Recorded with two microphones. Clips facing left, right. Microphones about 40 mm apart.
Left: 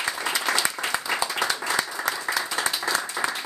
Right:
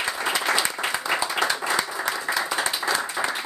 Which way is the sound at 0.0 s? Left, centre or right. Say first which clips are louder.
Right 1 dB; centre.